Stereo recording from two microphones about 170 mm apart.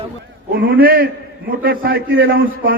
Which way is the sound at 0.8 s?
60° right (ahead or behind).